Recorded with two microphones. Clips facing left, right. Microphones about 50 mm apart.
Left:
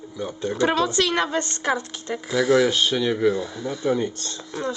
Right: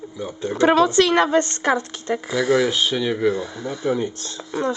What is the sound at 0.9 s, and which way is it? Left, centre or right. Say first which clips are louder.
Speech: right 6 dB; right.